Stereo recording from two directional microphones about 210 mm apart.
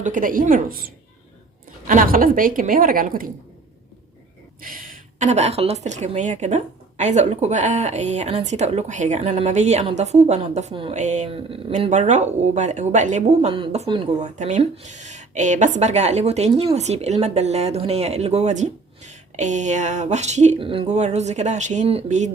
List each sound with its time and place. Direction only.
0.0 s a woman's voice: 40° right (ahead or behind)
4.6 s a woman's voice: 40° right (ahead or behind)